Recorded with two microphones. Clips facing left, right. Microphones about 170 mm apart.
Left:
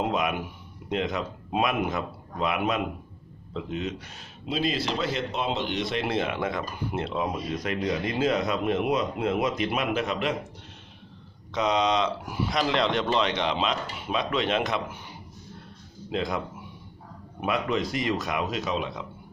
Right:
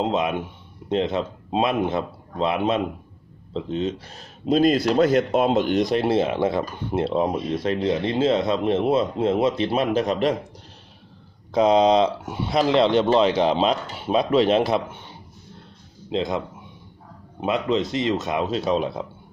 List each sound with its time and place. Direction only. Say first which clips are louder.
0.0 s speech: right 4 dB; 25° right (ahead or behind)
11.5 s speech: right 8 dB; 35° right (ahead or behind)
16.1 s speech: right 4 dB; 25° right (ahead or behind)